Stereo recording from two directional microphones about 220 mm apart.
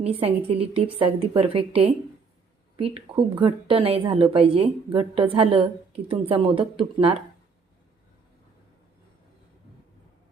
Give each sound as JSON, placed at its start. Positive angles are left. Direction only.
{"t": 0.0, "sound": "a woman's voice", "side_deg": -25}